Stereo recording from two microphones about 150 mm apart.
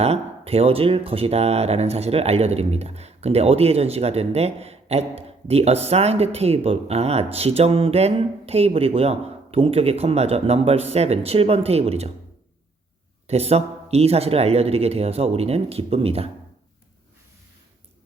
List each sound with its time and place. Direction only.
0.0 s speech: 40° right (ahead or behind)
13.2 s speech: 45° right (ahead or behind)